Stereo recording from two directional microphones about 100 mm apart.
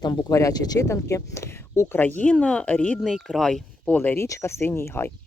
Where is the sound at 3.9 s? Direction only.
20° left (ahead or behind).